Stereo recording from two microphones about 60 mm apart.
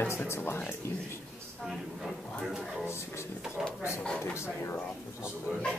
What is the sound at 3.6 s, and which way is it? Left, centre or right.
Speech, centre.